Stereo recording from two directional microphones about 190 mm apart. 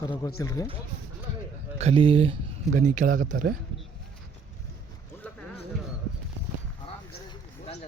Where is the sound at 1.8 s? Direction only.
30° right (ahead or behind).